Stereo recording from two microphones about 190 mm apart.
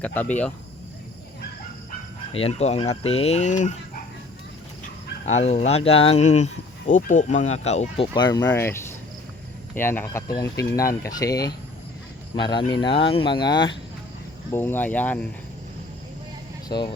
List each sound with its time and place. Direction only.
0.0 s speech: 10° left (ahead or behind)
2.3 s speech: 30° left (ahead or behind)
5.2 s speech: 35° left (ahead or behind)
8.1 s speech: 20° left (ahead or behind)
12.4 s speech: 25° left (ahead or behind)
14.5 s speech: 10° left (ahead or behind)
16.6 s speech: 25° left (ahead or behind)